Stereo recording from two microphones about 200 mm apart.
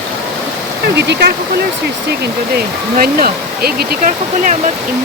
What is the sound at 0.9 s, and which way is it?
Speech, 55° right (ahead or behind).